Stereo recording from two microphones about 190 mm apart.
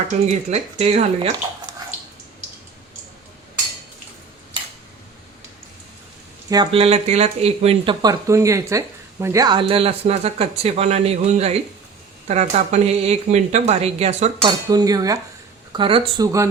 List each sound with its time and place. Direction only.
0.1 s speech: 35° right (ahead or behind)
6.5 s speech: 25° right (ahead or behind)
8.0 s speech: 15° right (ahead or behind); by 14.5 s 35° right (ahead or behind)
14.7 s speech: 20° right (ahead or behind)